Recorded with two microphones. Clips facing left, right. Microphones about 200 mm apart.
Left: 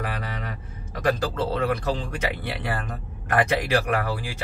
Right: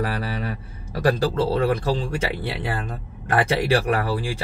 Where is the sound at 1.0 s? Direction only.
30° right (ahead or behind).